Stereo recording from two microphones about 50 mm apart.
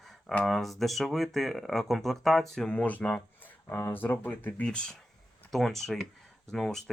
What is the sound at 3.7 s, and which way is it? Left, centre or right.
Speech, left.